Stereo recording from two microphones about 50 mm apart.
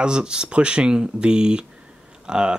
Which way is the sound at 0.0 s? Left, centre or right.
Centre.